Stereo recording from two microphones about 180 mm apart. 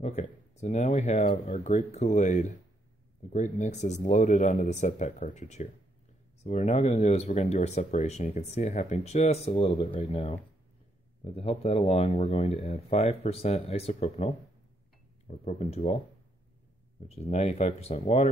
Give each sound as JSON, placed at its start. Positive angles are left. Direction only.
{"t": 0.0, "sound": "speech", "side_deg": 40}
{"t": 17.1, "sound": "speech", "side_deg": 35}